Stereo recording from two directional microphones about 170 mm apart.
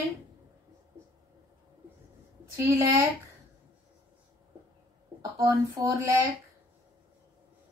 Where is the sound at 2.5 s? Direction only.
15° right (ahead or behind).